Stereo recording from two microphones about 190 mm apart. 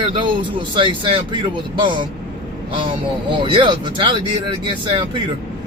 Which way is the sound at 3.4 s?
25° right (ahead or behind).